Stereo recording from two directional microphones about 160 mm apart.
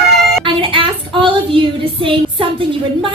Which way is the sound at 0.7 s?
30° right (ahead or behind).